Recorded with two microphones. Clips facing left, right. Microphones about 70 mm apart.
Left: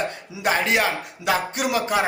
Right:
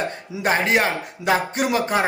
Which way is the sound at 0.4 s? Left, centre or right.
Right.